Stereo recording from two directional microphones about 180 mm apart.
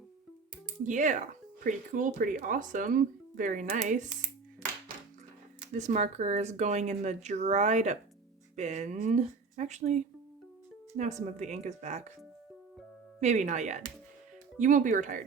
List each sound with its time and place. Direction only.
0.9 s speech: 45° right (ahead or behind)
5.7 s speech: 40° right (ahead or behind)
13.1 s speech: 40° right (ahead or behind)